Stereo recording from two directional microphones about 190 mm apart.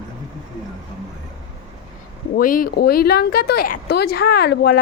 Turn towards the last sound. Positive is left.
turn(degrees=60)  # may be behind; listen again after turning